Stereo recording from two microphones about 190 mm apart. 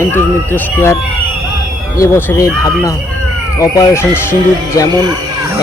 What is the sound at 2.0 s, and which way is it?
Speech, 15° left (ahead or behind).